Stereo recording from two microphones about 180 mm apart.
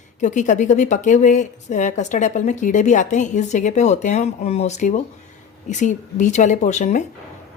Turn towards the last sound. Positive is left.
turn(degrees=40)  # may be behind; listen again after turning